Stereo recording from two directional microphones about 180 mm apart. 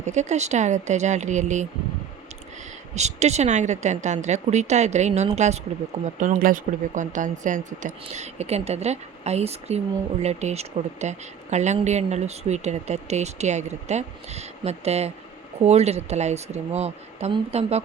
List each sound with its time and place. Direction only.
0.0 s a woman's voice: 40° right (ahead or behind)
2.9 s a woman's voice: 40° right (ahead or behind)